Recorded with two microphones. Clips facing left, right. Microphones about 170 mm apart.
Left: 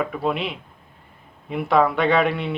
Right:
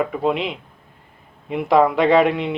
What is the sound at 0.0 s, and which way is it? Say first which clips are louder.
Speech: right 3 dB; 20° right (ahead or behind).